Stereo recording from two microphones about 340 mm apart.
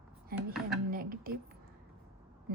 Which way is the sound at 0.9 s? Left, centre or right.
Right.